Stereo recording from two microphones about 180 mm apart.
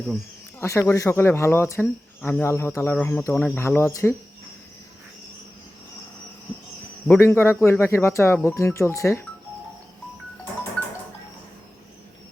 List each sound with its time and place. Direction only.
0.6 s speech: 15° left (ahead or behind)
7.1 s speech: 15° left (ahead or behind)